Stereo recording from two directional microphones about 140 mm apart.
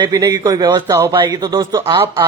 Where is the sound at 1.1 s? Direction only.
30° right (ahead or behind).